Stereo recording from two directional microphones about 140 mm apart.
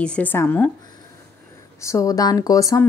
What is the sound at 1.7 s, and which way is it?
A woman's voice, 20° left (ahead or behind).